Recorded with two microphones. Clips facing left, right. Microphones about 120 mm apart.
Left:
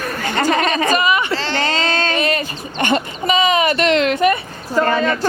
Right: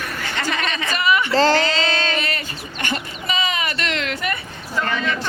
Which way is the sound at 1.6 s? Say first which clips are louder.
Left 1 dB; 45° left (ahead or behind).